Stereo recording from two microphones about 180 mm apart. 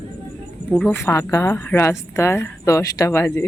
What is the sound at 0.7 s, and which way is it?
A woman's voice, 10° left (ahead or behind).